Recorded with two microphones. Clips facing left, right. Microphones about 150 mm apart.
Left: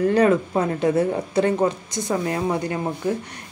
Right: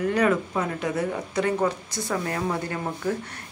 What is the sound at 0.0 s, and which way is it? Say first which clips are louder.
Speech: left 5 dB; 35° left (ahead or behind).